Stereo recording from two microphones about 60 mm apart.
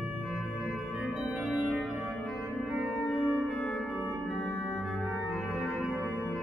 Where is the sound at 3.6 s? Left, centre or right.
Centre.